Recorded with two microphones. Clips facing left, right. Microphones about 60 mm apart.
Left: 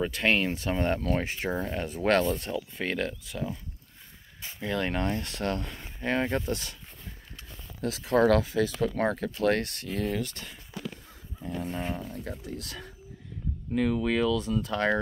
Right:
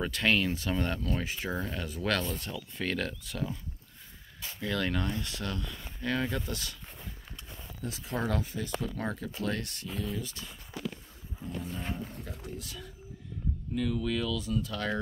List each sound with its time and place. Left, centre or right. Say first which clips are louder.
0.0 s speech: left 2 dB; left
1.5 s speech: left 4 dB; left
2.5 s speech: left 3 dB; centre
4.6 s speech: left 2 dB; left
5.9 s speech: left 4 dB; left
7.8 s speech: left 11 dB; left
8.8 s speech: left 8 dB; left
12.1 s speech: left 5 dB; left
13.7 s speech: left 6 dB; left